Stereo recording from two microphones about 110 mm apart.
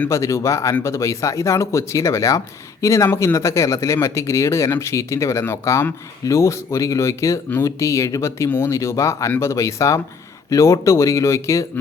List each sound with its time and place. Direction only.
0.1 s speech: 30° left (ahead or behind)